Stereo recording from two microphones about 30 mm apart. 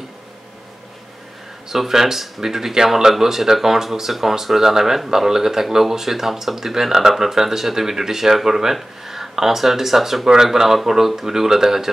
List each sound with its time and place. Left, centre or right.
1.7 s speech: centre